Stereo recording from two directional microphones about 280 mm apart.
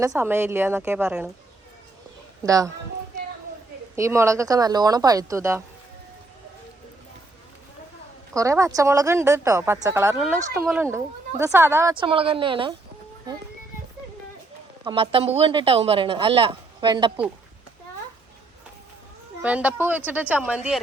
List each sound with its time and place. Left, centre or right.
0.0 s a woman's voice: centre
2.4 s a woman's voice: centre
3.9 s a woman's voice: centre
8.3 s a woman's voice: centre
14.8 s speech: centre
19.4 s speech: centre